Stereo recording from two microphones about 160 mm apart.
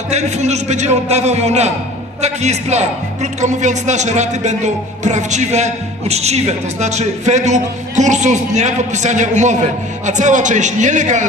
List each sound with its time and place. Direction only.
0.1 s speech: 45° right (ahead or behind)